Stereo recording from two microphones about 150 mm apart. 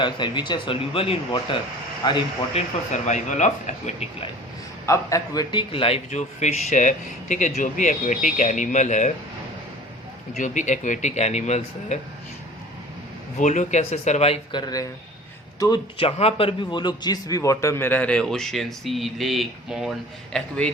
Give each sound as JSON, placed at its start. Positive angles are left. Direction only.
{"t": 0.0, "sound": "speech", "side_deg": 30}
{"t": 2.0, "sound": "speech", "side_deg": 30}
{"t": 2.5, "sound": "speech", "side_deg": 50}
{"t": 4.9, "sound": "a man's voice", "side_deg": 20}
{"t": 10.3, "sound": "speech", "side_deg": 55}
{"t": 13.4, "sound": "speech", "side_deg": 50}
{"t": 14.5, "sound": "a man's voice", "side_deg": 25}
{"t": 16.0, "sound": "a man's voice", "side_deg": 40}